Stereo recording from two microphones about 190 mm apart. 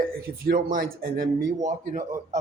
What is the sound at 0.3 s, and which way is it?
Speech, 50° right (ahead or behind).